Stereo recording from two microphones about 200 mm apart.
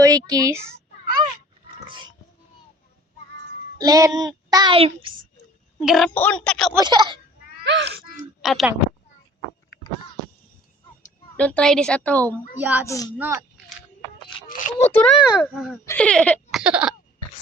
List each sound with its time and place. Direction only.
0.0 s a child's voice: 15° right (ahead or behind)
1.9 s a sound: 20° right (ahead or behind)
3.8 s a child's voice: 15° right (ahead or behind)
5.8 s speech: centre (ahead or behind)
6.7 s a child's voice: 20° right (ahead or behind)
7.6 s speech: 60° right (ahead or behind)
8.2 s speech: centre (ahead or behind)
11.3 s a woman's voice: 5° left (ahead or behind)
12.5 s a child's voice: 10° right (ahead or behind)
12.8 s a woman's voice: 15° left (ahead or behind)
13.1 s a child's voice: 10° right (ahead or behind)
14.4 s a sound: 40° left (ahead or behind)
14.9 s speech: centre (ahead or behind)